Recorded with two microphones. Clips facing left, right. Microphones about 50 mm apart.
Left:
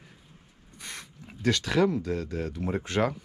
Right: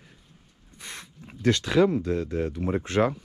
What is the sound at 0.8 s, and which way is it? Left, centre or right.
Speech, right.